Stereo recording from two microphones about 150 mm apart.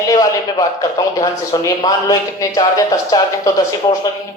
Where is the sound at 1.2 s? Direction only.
25° left (ahead or behind).